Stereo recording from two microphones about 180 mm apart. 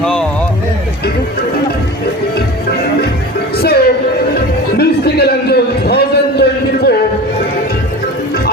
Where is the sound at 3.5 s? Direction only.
60° left (ahead or behind).